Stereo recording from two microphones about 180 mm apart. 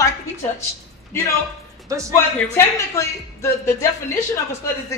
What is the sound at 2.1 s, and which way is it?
Speech, 15° left (ahead or behind).